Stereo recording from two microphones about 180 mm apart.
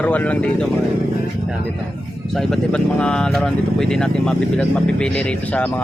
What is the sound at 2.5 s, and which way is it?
Speech, 5° left (ahead or behind).